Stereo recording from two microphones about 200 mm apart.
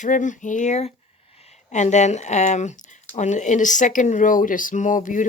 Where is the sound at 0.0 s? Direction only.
40° left (ahead or behind).